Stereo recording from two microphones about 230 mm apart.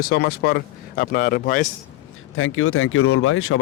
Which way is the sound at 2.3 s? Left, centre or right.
Left.